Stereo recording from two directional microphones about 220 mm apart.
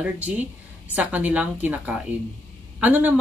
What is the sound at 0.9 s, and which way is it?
A woman's voice, 5° right (ahead or behind).